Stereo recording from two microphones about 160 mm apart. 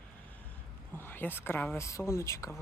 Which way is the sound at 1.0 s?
15° left (ahead or behind).